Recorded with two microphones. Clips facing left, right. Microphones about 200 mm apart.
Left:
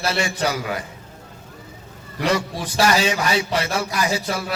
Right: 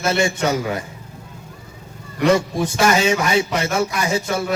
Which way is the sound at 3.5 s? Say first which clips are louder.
Right 3 dB; 30° left (ahead or behind).